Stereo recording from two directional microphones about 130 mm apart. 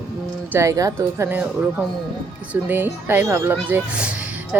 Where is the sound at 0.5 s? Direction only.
25° right (ahead or behind).